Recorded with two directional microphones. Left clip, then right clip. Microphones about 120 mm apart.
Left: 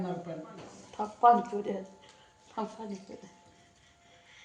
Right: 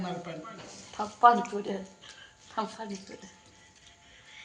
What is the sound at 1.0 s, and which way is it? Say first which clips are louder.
Speech: right 1 dB; 10° right (ahead or behind).